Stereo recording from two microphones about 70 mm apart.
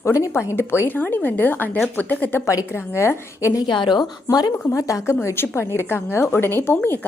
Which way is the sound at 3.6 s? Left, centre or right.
Left.